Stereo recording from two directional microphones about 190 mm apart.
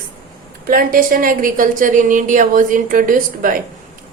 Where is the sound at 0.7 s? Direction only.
50° right (ahead or behind).